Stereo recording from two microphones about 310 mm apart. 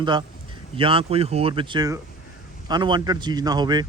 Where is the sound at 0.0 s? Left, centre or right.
Centre.